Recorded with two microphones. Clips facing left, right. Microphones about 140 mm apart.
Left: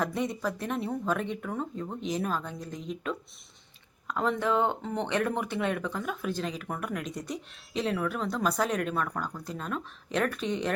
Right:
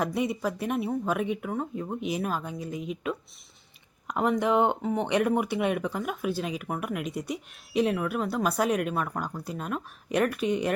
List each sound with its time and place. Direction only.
0.0 s speech: 10° right (ahead or behind)